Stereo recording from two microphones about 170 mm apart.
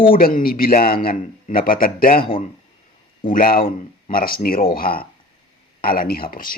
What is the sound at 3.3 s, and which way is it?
A man's voice, 55° left (ahead or behind).